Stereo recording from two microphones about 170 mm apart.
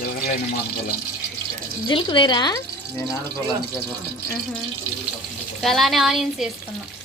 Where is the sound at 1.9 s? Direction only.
25° left (ahead or behind).